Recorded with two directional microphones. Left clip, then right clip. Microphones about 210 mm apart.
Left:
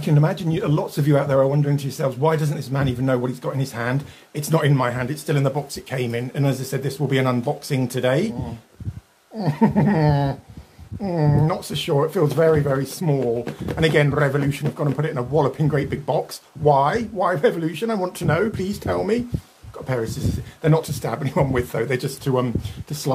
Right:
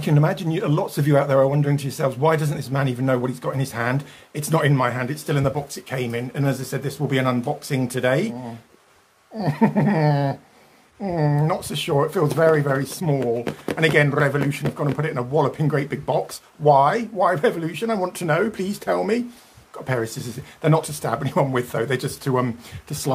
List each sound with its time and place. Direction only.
0.0 s speech: 5° right (ahead or behind)
9.4 s speech: centre (ahead or behind)